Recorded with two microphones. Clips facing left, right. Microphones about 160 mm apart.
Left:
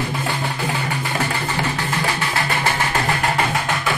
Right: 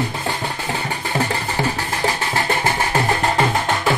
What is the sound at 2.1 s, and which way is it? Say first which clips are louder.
Music: right 1 dB; 30° right (ahead or behind).